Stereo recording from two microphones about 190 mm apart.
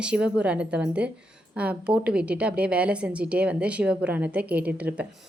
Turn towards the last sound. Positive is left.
turn(degrees=-10)  # may be behind; listen again after turning